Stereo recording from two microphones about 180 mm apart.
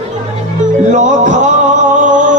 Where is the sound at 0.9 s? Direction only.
40° right (ahead or behind).